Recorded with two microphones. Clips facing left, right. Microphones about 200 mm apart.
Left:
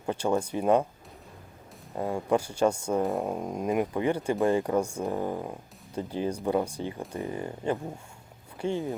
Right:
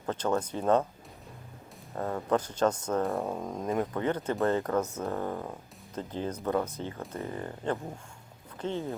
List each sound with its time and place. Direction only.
0.0 s speech: 10° left (ahead or behind)
2.0 s speech: 10° left (ahead or behind)